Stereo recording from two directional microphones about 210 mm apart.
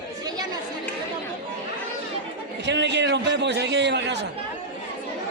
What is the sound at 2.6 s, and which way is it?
A man's voice, 55° right (ahead or behind).